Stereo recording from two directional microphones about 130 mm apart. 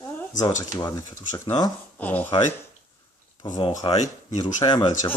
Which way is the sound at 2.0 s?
15° left (ahead or behind).